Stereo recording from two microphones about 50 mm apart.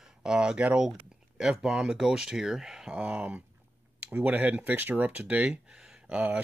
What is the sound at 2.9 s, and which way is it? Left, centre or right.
Speech, right.